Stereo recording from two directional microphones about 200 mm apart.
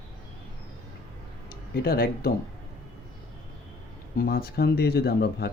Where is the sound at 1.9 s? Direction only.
50° left (ahead or behind).